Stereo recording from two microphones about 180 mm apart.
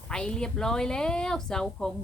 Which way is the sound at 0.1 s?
5° left (ahead or behind).